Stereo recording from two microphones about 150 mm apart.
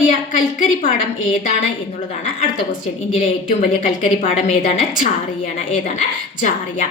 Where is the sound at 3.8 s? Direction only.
65° left (ahead or behind).